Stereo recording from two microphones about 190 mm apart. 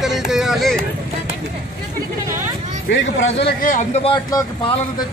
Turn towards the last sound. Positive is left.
turn(degrees=20)  # may be behind; listen again after turning